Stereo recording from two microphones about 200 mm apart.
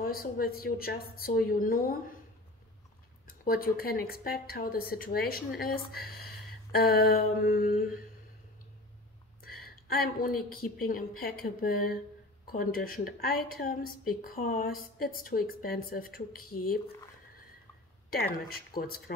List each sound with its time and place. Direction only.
0.0 s speech: 45° left (ahead or behind)
3.3 s speech: 45° left (ahead or behind)
9.4 s a sound: 50° left (ahead or behind)
10.5 s speech: 45° left (ahead or behind)
18.1 s speech: 50° left (ahead or behind)